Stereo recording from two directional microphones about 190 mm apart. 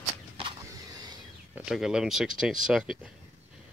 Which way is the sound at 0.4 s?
25° right (ahead or behind).